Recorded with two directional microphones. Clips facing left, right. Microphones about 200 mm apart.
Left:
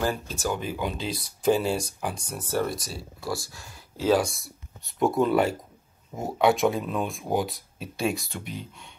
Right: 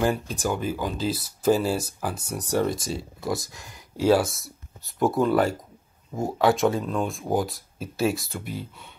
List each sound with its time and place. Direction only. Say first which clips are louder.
0.0 s speech: right 3 dB; 15° right (ahead or behind)
0.7 s speech: right 3 dB; centre (ahead or behind)
2.3 s speech: right 4 dB; 15° right (ahead or behind)